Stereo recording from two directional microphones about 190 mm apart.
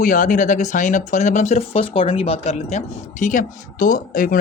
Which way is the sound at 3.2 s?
45° left (ahead or behind).